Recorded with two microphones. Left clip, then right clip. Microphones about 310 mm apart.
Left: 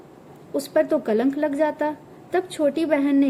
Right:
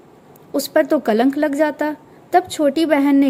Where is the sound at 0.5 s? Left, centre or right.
Centre.